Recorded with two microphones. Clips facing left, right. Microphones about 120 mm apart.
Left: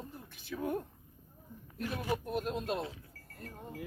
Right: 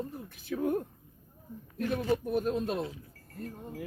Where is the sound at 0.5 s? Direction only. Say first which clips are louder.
Right 6 dB; 50° right (ahead or behind).